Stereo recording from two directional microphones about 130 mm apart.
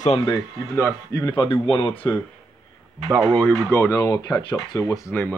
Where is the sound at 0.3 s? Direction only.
20° left (ahead or behind); by 2.0 s 35° left (ahead or behind).